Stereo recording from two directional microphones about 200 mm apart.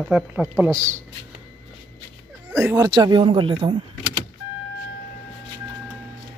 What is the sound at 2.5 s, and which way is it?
Speech, 10° right (ahead or behind).